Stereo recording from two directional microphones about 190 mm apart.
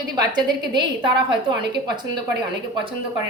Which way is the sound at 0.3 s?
25° right (ahead or behind).